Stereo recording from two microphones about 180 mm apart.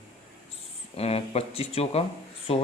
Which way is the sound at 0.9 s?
35° left (ahead or behind).